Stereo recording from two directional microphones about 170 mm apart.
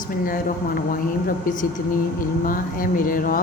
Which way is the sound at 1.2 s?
50° left (ahead or behind).